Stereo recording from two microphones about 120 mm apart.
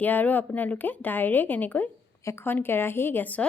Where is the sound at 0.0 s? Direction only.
15° left (ahead or behind).